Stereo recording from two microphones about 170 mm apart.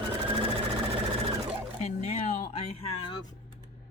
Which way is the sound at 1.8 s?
45° left (ahead or behind).